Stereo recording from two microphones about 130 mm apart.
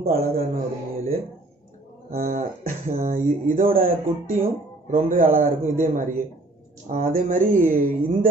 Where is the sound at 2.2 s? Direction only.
90° right.